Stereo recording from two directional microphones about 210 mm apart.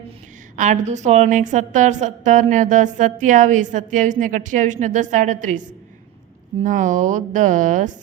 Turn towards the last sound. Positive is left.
turn(degrees=-40)  # may be behind; listen again after turning